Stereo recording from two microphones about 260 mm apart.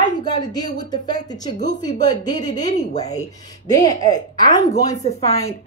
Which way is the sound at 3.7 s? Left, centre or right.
Centre.